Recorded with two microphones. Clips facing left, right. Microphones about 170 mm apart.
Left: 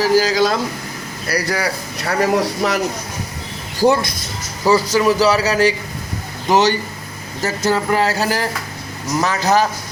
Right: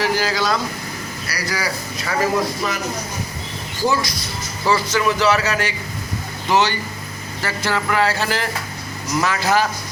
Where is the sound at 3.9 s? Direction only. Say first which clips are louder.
Left 4 dB; 55° left (ahead or behind).